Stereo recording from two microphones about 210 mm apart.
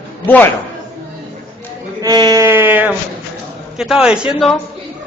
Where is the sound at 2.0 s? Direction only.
20° right (ahead or behind).